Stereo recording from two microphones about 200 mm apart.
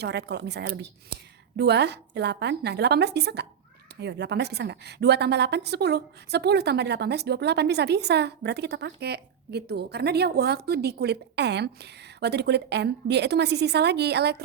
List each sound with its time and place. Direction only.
0.0 s a woman's voice: 55° right (ahead or behind)